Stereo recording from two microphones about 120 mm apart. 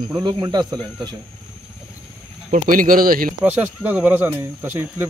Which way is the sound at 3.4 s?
15° right (ahead or behind).